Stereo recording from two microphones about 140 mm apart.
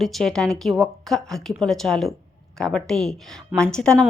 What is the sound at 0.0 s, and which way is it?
A woman's voice, centre (ahead or behind).